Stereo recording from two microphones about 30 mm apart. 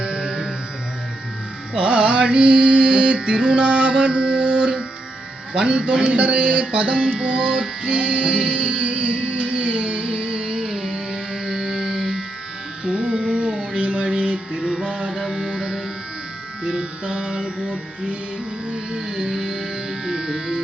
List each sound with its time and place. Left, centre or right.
0.0 s music: right
1.7 s music: right
2.2 s speech: right
2.5 s mantra: right
5.5 s speech: right
6.7 s music: right
7.2 s speech: right
7.9 s music: right
10.4 s music: right
13.1 s music: right
15.1 s music: centre
15.5 s music: right
17.4 s music: right
18.9 s music: right